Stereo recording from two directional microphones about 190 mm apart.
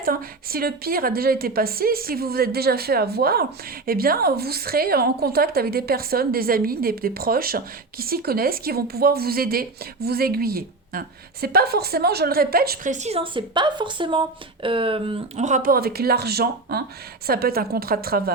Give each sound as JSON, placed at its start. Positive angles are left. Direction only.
{"t": 0.0, "sound": "a woman's voice", "side_deg": -50}